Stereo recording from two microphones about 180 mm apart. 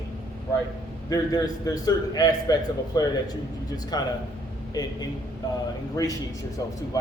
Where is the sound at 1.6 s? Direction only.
20° left (ahead or behind).